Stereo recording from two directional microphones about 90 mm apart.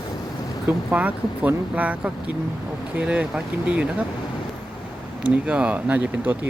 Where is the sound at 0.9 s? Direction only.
15° right (ahead or behind).